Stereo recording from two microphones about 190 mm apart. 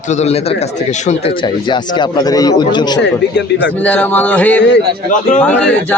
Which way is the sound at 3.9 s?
10° left (ahead or behind).